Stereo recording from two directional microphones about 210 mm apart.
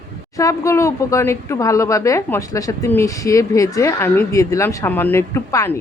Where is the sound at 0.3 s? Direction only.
15° left (ahead or behind).